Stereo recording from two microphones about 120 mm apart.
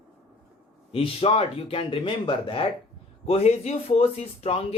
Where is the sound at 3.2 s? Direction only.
60° left (ahead or behind).